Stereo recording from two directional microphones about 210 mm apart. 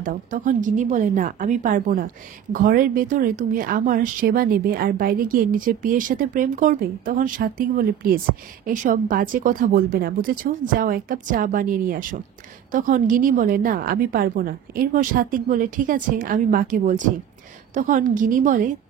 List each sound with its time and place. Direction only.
0.0 s a woman's voice: 40° right (ahead or behind)